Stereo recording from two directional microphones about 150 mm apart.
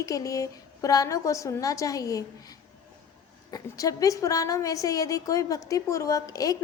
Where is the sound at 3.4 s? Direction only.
25° left (ahead or behind).